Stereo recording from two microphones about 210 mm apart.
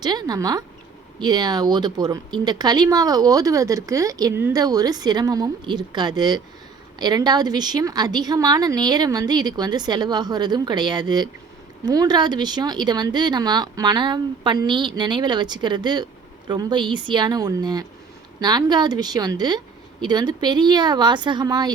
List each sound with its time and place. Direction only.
0.0 s speech: 20° right (ahead or behind)